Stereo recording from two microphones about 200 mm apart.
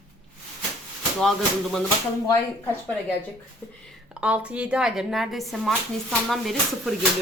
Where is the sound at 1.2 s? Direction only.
Centre (ahead or behind).